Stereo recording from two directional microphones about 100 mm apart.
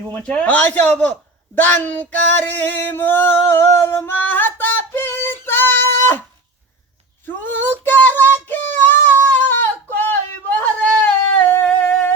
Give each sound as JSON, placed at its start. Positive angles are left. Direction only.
{"t": 0.1, "sound": "speech", "side_deg": 15}
{"t": 1.5, "sound": "music", "side_deg": 20}
{"t": 7.4, "sound": "child singing", "side_deg": 20}
{"t": 9.3, "sound": "a sound", "side_deg": 20}
{"t": 11.4, "sound": "singing", "side_deg": 15}